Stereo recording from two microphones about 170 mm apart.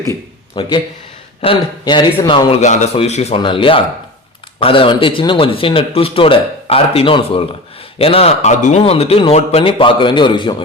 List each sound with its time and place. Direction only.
0.6 s a man's voice: 30° left (ahead or behind)